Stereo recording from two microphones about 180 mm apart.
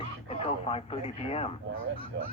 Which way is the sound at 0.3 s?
30° left (ahead or behind).